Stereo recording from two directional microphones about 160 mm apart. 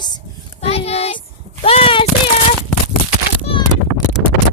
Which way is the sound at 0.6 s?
40° left (ahead or behind).